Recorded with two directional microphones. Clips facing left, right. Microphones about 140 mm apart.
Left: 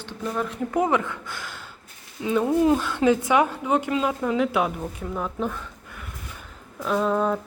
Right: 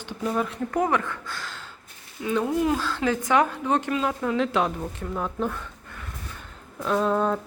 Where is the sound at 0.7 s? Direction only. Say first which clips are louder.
Left 2 dB; 15° left (ahead or behind); by 5.6 s 5° right (ahead or behind).